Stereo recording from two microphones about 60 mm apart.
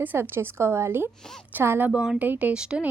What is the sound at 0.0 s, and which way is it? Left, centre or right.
A woman's voice, right.